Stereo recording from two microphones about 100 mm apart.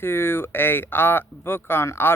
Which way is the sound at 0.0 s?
25° left (ahead or behind).